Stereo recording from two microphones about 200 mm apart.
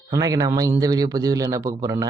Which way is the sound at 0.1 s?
15° right (ahead or behind).